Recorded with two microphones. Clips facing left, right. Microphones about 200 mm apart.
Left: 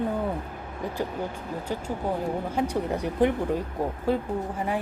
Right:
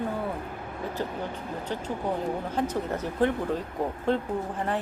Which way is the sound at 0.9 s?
10° left (ahead or behind).